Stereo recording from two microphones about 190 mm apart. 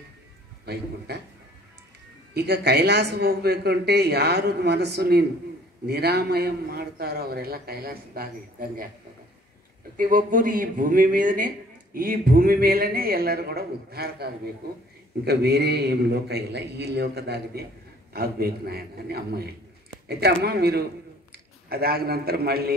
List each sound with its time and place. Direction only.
0.7 s a man's voice: 60° right (ahead or behind)
2.3 s a man's voice: 55° right (ahead or behind)
9.9 s a man's voice: 45° right (ahead or behind)